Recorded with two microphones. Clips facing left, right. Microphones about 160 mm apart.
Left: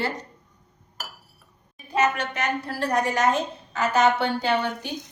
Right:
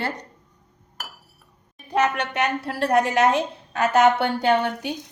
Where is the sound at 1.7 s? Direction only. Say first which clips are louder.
Right 1 dB; 60° right (ahead or behind).